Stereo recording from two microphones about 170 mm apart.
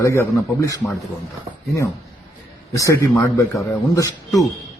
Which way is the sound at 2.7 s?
15° left (ahead or behind).